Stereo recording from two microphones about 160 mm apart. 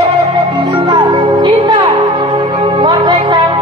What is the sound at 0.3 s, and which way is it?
Music, 25° right (ahead or behind).